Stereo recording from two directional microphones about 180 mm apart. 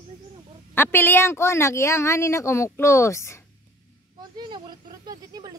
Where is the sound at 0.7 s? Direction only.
10° left (ahead or behind).